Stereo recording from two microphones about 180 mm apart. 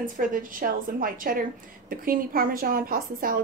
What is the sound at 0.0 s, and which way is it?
A woman's voice, 50° right (ahead or behind).